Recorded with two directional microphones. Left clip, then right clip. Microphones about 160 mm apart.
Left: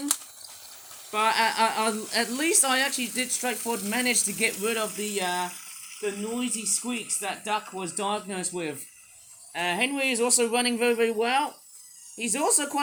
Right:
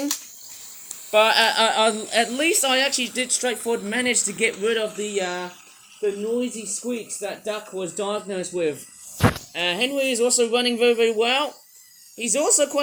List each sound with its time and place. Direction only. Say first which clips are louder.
1.1 s speech: right 7 dB; 20° left (ahead or behind)
9.7 s a man's voice: right 3 dB; 40° left (ahead or behind)